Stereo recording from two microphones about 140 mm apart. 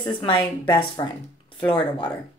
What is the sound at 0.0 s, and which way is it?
A woman's voice, 35° left (ahead or behind).